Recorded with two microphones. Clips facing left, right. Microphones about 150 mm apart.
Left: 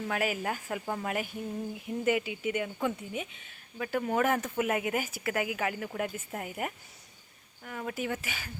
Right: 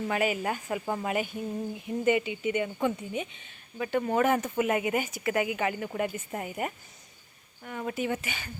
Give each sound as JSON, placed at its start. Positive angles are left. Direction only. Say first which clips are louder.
{"t": 0.1, "sound": "speech", "louder": "right 3 dB", "side_deg": 0}